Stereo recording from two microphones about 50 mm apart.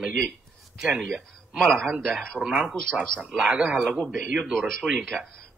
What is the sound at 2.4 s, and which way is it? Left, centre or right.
A man's voice, right.